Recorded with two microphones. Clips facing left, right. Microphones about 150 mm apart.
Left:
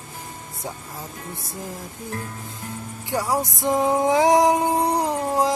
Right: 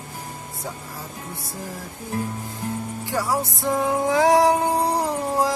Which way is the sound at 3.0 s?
20° left (ahead or behind).